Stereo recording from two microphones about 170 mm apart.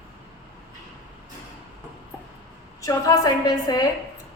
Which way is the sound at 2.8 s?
20° left (ahead or behind).